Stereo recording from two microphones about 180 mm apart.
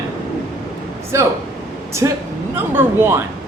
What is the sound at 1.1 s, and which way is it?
Speech, 15° right (ahead or behind).